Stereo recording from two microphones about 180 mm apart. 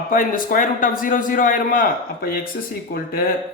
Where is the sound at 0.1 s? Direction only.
50° left (ahead or behind).